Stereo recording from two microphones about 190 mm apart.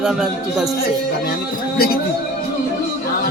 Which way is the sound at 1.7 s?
55° left (ahead or behind).